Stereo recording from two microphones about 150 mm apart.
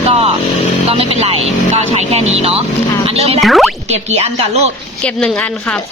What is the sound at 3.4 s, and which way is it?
Speech, centre (ahead or behind).